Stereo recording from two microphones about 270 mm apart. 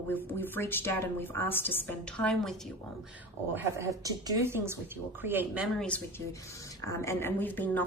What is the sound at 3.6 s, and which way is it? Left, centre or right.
A woman's voice, centre.